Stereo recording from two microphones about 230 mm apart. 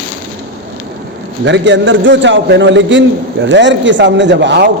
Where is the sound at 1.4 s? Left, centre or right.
Right.